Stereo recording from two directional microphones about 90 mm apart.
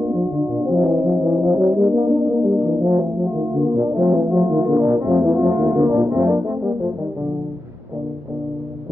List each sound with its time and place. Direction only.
0.7 s brass instrument: 30° right (ahead or behind)